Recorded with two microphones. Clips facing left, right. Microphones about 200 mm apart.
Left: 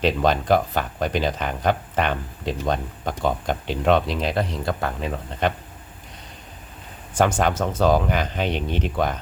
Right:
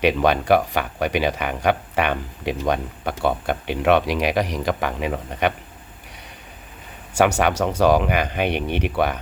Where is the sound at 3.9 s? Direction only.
75° right (ahead or behind).